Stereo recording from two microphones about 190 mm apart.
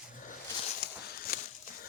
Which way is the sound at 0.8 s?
50° left (ahead or behind).